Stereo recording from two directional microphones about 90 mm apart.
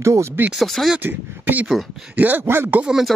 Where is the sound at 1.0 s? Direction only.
20° right (ahead or behind).